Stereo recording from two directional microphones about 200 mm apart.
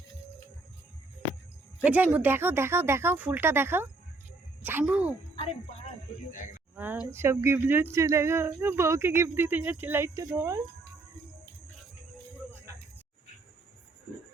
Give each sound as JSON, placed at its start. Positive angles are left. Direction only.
{"t": 1.8, "sound": "speech", "side_deg": -5}
{"t": 5.4, "sound": "speech", "side_deg": 30}
{"t": 6.7, "sound": "a woman's voice", "side_deg": -10}